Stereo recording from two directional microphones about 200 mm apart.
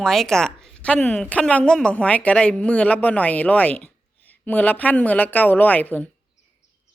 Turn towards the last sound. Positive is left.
turn(degrees=10)  # may be behind; listen again after turning